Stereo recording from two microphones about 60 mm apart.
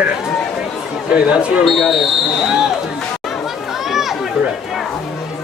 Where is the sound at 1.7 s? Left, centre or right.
Centre.